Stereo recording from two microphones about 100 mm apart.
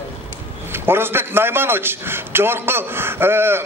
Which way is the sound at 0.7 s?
20° right (ahead or behind).